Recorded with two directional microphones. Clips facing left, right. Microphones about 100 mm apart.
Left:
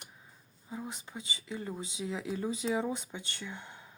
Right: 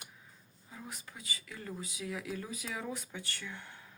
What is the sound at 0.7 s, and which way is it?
Speech, 25° left (ahead or behind).